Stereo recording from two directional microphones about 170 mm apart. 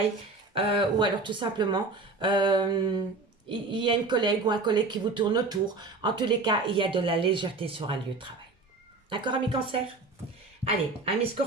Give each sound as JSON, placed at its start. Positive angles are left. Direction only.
{"t": 0.5, "sound": "speech", "side_deg": -30}
{"t": 10.6, "sound": "speech", "side_deg": -35}